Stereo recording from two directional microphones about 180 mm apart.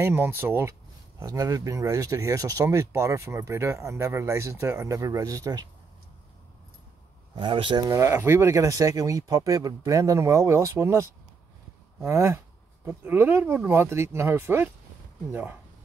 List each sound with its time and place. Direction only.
0.0 s speech: 10° right (ahead or behind)
7.3 s speech: 30° right (ahead or behind); by 14.7 s 15° right (ahead or behind)